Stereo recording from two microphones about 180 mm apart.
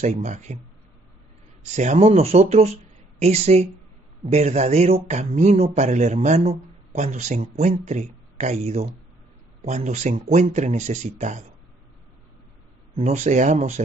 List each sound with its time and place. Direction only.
0.0 s speech: 40° right (ahead or behind)
1.6 s speech: 40° right (ahead or behind)
12.9 s speech: 40° right (ahead or behind)